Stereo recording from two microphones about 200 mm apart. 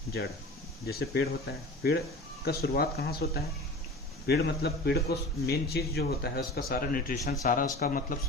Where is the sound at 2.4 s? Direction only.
50° left (ahead or behind).